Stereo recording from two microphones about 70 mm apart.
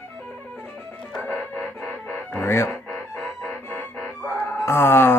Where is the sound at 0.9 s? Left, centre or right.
Centre.